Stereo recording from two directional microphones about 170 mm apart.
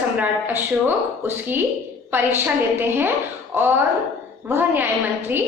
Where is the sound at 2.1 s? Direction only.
10° right (ahead or behind).